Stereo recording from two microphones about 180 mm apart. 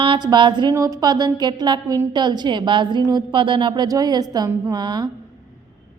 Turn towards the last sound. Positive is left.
turn(degrees=-25)  # may be behind; listen again after turning